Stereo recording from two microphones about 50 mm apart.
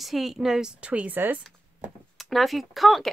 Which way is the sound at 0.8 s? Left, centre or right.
Right.